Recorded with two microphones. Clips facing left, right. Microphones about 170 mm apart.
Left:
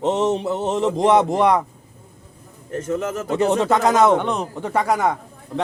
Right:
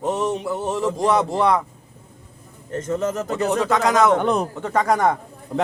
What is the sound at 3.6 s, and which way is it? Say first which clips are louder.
Speech: even; 25° left (ahead or behind).